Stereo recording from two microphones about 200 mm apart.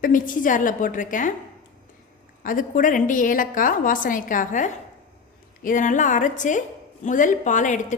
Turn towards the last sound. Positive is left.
turn(degrees=40)  # may be behind; listen again after turning